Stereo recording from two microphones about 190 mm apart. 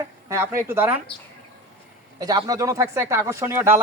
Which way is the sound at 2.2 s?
20° right (ahead or behind).